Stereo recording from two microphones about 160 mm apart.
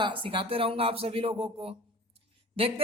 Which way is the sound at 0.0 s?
30° right (ahead or behind).